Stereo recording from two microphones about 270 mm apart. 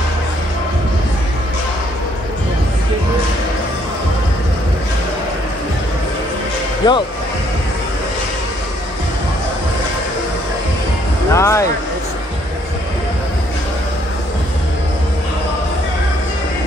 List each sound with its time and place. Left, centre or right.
6.8 s speech: centre
11.3 s speech: centre